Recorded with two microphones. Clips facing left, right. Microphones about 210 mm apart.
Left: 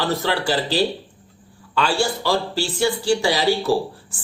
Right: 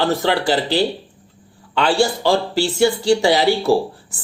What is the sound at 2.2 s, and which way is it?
Speech, 15° right (ahead or behind).